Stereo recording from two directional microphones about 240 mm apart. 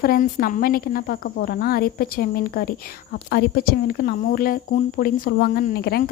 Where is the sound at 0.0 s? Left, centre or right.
Left.